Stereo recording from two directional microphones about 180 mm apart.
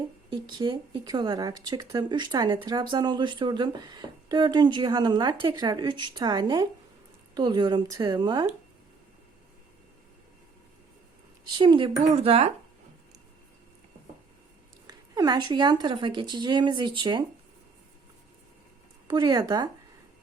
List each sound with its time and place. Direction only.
0.3 s speech: 25° right (ahead or behind)
11.4 s speech: 25° right (ahead or behind)
14.8 s speech: 20° right (ahead or behind)
19.0 s speech: 25° right (ahead or behind)